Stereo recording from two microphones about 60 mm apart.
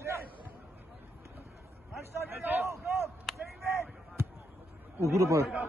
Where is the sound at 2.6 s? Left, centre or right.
Right.